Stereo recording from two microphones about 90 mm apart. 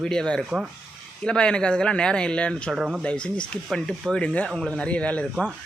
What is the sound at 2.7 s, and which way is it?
Speech, 10° right (ahead or behind).